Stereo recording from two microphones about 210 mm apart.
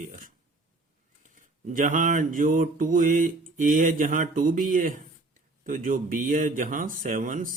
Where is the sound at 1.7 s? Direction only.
40° right (ahead or behind).